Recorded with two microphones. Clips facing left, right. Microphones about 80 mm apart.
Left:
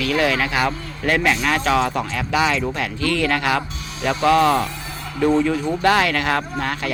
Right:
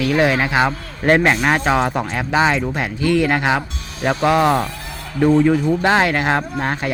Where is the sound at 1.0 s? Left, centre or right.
Right.